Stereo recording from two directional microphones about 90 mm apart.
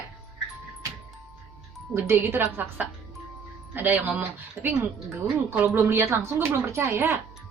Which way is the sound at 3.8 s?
20° right (ahead or behind).